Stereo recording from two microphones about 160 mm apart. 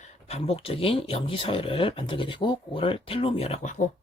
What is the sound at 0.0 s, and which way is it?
Speech, 40° left (ahead or behind).